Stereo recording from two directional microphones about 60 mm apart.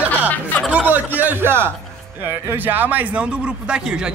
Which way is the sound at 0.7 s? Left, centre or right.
Right.